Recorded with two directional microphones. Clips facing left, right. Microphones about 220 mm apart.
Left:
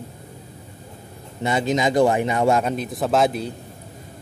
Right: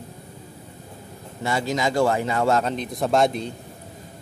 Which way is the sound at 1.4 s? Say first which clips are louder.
Left 3 dB; 20° left (ahead or behind).